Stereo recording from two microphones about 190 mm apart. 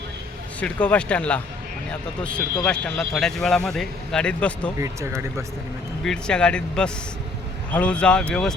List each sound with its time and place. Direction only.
0.6 s speech: 5° left (ahead or behind)
4.8 s speech: 15° right (ahead or behind)
6.1 s speech: 5° left (ahead or behind)